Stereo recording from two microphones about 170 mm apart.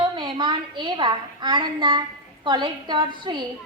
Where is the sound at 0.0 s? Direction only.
25° right (ahead or behind).